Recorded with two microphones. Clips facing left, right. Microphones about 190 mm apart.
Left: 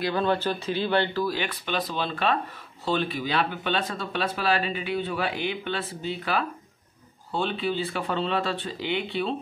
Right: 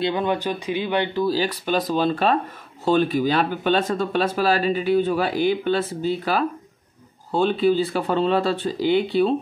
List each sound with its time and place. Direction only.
0.0 s speech: 15° right (ahead or behind)
1.2 s speech: 35° right (ahead or behind)